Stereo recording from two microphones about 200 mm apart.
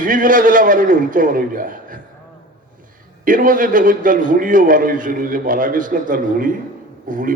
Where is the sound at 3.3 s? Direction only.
45° right (ahead or behind).